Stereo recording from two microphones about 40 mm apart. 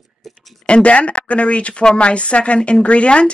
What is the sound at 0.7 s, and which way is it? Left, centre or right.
Speech, left.